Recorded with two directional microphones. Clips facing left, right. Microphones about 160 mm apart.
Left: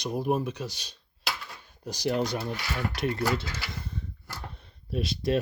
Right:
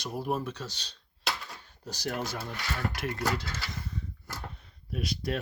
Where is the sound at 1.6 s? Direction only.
15° left (ahead or behind).